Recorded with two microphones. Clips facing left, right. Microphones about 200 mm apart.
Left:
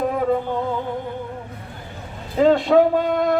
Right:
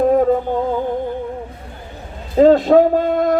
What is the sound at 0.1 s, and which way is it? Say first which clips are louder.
Music: right 7 dB; 40° right (ahead or behind).